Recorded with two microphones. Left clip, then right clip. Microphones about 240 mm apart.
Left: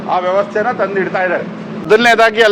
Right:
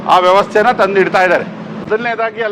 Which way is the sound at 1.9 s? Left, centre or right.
Left.